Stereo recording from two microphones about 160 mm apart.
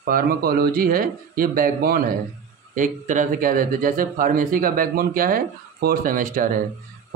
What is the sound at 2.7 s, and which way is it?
Speech, 50° right (ahead or behind).